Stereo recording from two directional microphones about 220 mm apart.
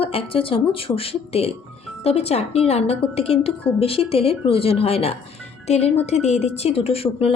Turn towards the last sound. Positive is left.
turn(degrees=25)  # may be behind; listen again after turning